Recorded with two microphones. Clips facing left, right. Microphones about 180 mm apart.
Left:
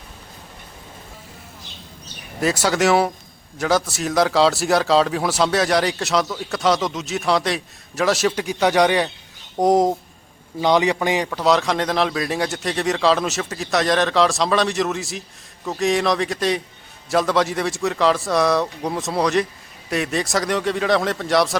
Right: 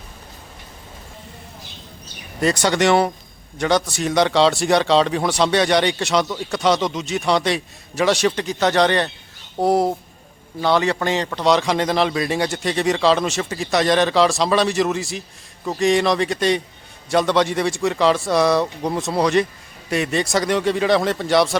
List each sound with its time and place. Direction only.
2.4 s a man's voice: 5° left (ahead or behind)
11.3 s speech: centre (ahead or behind)